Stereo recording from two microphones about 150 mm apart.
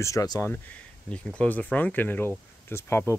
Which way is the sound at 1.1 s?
10° left (ahead or behind).